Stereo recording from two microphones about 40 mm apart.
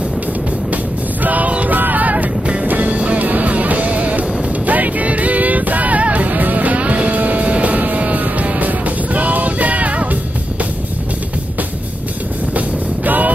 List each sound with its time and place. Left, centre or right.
1.2 s music: right
1.8 s vehicle: right
2.6 s music: right
12.5 s vehicle: right